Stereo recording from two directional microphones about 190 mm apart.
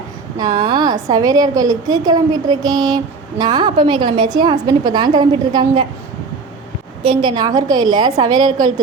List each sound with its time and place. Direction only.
0.3 s a woman's voice: 20° right (ahead or behind)
7.0 s a woman's voice: 25° right (ahead or behind)